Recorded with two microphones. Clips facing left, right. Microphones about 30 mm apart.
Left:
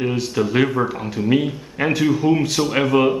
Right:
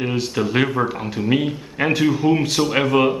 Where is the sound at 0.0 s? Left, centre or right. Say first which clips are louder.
Left 1 dB; centre.